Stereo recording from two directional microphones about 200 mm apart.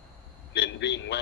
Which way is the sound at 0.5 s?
60° left (ahead or behind).